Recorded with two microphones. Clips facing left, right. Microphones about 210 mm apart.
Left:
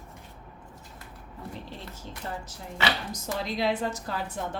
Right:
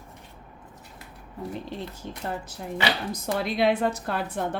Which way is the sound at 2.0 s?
60° right (ahead or behind).